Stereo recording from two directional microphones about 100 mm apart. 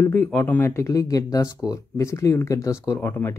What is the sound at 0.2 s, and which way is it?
Speech, 15° left (ahead or behind).